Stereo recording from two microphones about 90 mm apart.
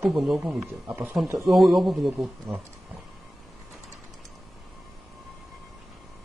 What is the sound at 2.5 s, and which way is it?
Speech, 30° right (ahead or behind).